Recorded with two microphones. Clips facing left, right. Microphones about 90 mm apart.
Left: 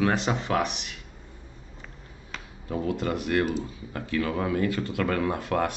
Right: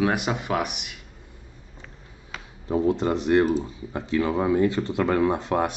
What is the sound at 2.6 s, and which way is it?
Speech, 25° right (ahead or behind).